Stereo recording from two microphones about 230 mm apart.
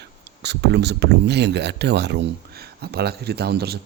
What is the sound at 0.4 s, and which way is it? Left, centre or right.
Speech, right.